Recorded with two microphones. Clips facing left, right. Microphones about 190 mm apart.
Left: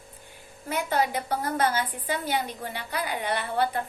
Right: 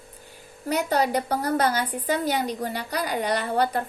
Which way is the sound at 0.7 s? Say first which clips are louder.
Right 3 dB; 40° right (ahead or behind).